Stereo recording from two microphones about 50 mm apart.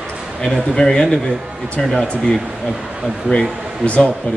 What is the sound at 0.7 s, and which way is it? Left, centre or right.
Speech, centre.